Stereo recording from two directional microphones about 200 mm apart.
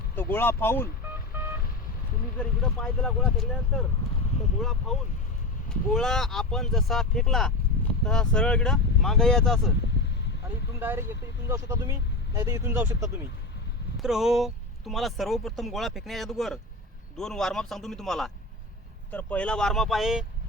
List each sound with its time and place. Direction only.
0.2 s speech: 10° left (ahead or behind)
1.3 s vehicle: 10° right (ahead or behind)
2.4 s speech: 5° left (ahead or behind)
10.8 s speech: 10° right (ahead or behind)
13.9 s speech: centre (ahead or behind)